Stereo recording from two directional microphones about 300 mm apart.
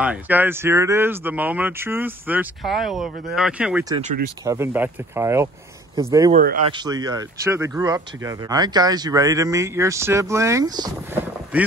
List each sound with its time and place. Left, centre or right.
0.0 s speech: centre
3.9 s speech: right
4.5 s speech: centre
6.3 s speech: right
6.7 s speech: centre